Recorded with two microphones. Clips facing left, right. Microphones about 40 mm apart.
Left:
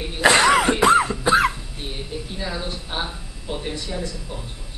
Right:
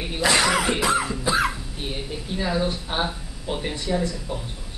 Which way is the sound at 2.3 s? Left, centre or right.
Centre.